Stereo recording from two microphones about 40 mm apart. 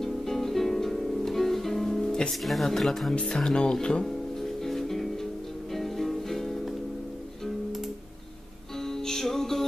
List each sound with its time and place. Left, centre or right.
0.0 s music: centre
2.4 s speech: centre
3.2 s speech: centre
4.0 s music: centre
8.7 s music: centre